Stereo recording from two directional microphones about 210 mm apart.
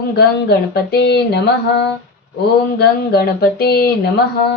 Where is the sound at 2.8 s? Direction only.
45° left (ahead or behind).